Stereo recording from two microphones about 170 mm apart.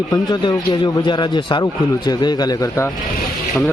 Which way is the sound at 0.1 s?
25° left (ahead or behind).